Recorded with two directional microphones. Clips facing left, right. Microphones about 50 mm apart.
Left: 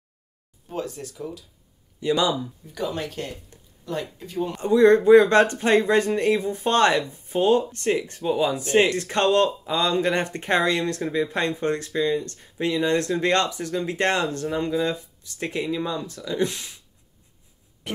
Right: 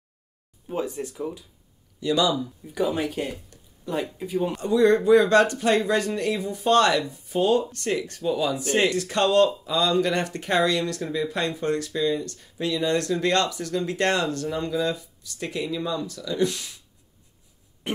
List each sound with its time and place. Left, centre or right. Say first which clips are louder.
0.7 s speech: right 2 dB; centre
2.0 s speech: even; left
2.7 s speech: right 4 dB; centre
4.6 s speech: left 4 dB; left
17.8 s music: right 3 dB; right